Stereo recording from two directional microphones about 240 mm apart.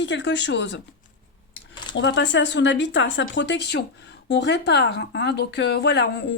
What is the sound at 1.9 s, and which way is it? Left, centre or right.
Speech, left.